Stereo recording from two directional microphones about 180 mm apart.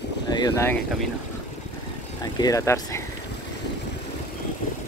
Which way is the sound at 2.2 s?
20° left (ahead or behind).